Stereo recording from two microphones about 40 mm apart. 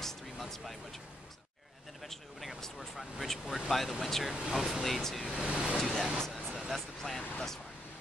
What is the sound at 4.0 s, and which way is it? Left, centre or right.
Speech, centre.